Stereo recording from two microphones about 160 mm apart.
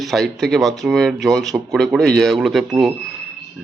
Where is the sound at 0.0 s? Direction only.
Centre (ahead or behind).